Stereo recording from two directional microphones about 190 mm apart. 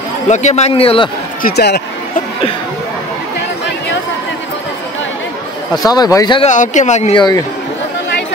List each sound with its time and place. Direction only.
0.3 s a man's voice: 35° left (ahead or behind)
1.4 s speech: 60° left (ahead or behind)
5.9 s speech: 20° left (ahead or behind)
6.4 s a man's voice: 40° left (ahead or behind)
7.2 s speech: 20° left (ahead or behind)